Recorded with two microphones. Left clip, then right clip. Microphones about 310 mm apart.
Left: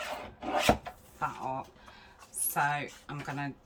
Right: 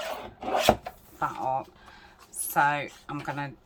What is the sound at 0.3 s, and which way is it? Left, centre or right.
Filing, right.